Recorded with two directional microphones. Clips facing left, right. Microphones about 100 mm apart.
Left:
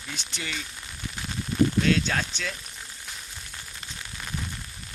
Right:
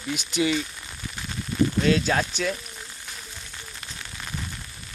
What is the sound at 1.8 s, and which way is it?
Speech, 10° right (ahead or behind).